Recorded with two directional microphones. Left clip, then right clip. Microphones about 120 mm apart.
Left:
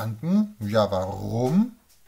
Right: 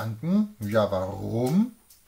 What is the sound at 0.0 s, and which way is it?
Speech, 30° left (ahead or behind).